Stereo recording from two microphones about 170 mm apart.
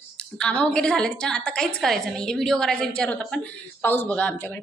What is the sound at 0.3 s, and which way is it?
Speech, 5° left (ahead or behind).